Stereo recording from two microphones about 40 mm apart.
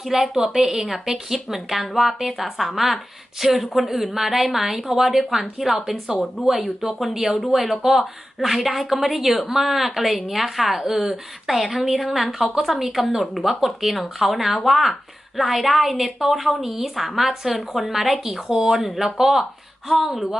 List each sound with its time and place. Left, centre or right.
0.0 s a woman's voice: centre